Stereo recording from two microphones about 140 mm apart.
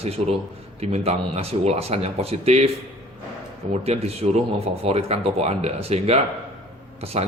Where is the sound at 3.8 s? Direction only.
45° right (ahead or behind).